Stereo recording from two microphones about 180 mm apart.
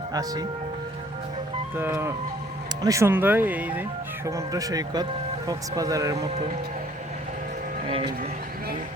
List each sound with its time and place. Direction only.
0.1 s speech: 20° right (ahead or behind)
1.7 s speech: 10° right (ahead or behind)